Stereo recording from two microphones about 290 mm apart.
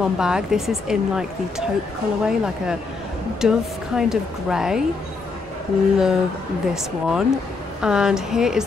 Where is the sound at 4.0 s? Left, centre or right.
Centre.